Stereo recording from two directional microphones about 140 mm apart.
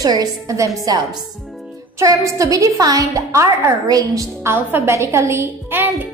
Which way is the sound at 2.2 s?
25° right (ahead or behind).